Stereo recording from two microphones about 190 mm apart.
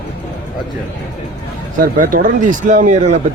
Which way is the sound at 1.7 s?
45° right (ahead or behind).